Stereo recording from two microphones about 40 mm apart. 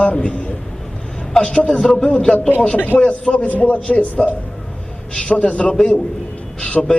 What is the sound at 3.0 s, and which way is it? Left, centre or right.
A man's voice, left.